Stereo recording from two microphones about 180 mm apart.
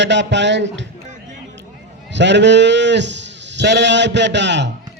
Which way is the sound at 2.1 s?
75° right (ahead or behind).